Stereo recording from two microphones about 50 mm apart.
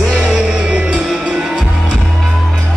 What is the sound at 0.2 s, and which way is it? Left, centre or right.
Music, centre.